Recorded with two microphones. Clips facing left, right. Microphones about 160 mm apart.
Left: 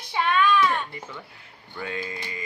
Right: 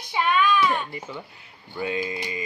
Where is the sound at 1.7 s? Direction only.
15° right (ahead or behind).